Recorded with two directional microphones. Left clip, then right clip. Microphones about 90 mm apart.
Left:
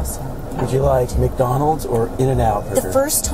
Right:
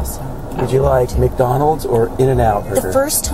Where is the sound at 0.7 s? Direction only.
20° right (ahead or behind).